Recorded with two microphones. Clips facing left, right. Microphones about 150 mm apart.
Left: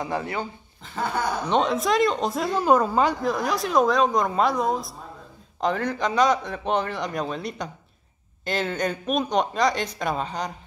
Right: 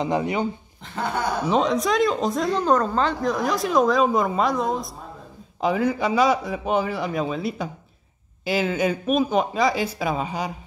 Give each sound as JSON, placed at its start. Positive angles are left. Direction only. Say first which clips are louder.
{"t": 0.0, "sound": "speech", "louder": "right 5 dB", "side_deg": -20}
{"t": 0.9, "sound": "speech", "louder": "right 1 dB", "side_deg": 0}